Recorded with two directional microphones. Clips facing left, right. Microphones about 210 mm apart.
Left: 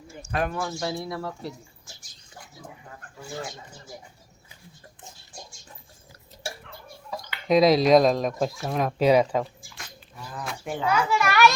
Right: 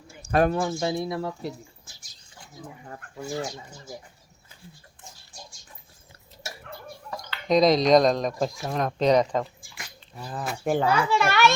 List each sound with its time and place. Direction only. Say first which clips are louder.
0.3 s speech: right 7 dB; 45° right (ahead or behind)
0.5 s speech: right 4 dB; 20° right (ahead or behind)
7.3 s speech: left 1 dB; 5° left (ahead or behind)
10.6 s speech: right 9 dB; 50° right (ahead or behind)
10.8 s speech: left 3 dB; 30° right (ahead or behind)